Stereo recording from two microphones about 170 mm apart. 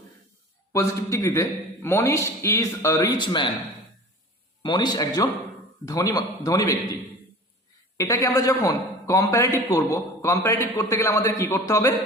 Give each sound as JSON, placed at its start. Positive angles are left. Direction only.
{"t": 0.7, "sound": "a man's voice", "side_deg": 15}
{"t": 4.6, "sound": "a man's voice", "side_deg": 25}
{"t": 7.9, "sound": "a man's voice", "side_deg": 20}